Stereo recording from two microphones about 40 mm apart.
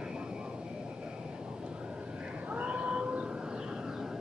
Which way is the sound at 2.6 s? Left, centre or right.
Right.